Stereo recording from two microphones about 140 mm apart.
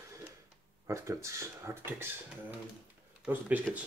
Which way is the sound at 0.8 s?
20° right (ahead or behind).